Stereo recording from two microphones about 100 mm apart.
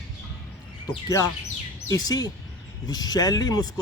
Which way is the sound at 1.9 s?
40° left (ahead or behind).